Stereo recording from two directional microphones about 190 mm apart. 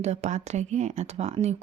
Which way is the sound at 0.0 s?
35° right (ahead or behind).